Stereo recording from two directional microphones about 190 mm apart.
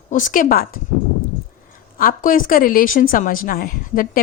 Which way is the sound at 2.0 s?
45° left (ahead or behind).